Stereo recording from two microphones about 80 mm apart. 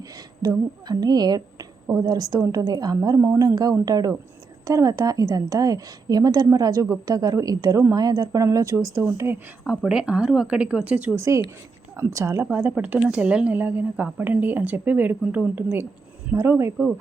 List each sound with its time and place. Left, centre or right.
0.4 s a woman's voice: right
7.9 s a woman's voice: right
9.9 s speech: centre
11.1 s speech: right
12.5 s speech: right
16.3 s speech: right